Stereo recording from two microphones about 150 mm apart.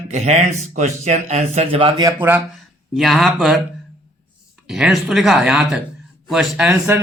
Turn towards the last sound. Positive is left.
turn(degrees=-10)  # may be behind; listen again after turning